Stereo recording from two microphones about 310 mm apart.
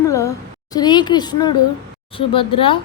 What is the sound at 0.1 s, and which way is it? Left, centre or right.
A woman's voice, centre.